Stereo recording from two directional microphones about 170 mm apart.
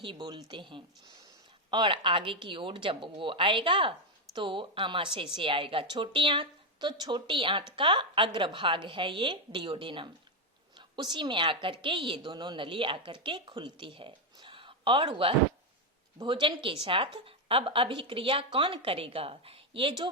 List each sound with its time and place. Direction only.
0.0 s a woman's voice: 25° right (ahead or behind)